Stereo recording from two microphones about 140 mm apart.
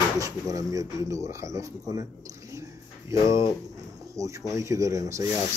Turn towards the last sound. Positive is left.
turn(degrees=-20)  # may be behind; listen again after turning